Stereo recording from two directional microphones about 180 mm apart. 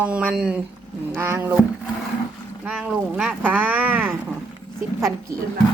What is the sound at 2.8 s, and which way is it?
Speech, 5° right (ahead or behind).